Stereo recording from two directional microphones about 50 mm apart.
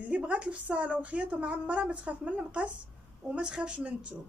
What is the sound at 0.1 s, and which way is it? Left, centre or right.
A child's voice, right.